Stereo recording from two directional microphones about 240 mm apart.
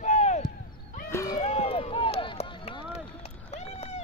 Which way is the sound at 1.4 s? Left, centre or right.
Left.